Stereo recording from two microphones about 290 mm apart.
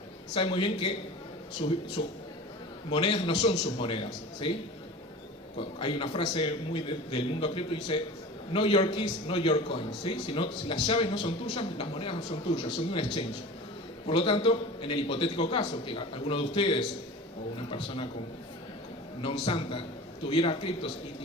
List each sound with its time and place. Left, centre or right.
0.3 s a man's voice: centre
2.0 s a man's voice: centre
5.5 s a man's voice: centre
19.2 s a man's voice: centre